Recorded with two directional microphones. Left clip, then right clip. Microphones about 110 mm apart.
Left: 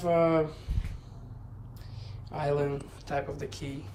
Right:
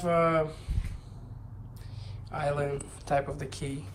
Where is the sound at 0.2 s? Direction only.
15° left (ahead or behind).